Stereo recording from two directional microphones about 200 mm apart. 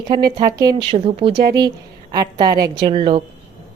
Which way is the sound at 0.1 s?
20° right (ahead or behind).